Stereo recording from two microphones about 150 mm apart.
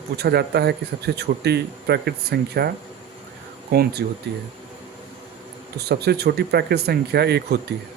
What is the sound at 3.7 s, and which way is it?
Speech, 90° right.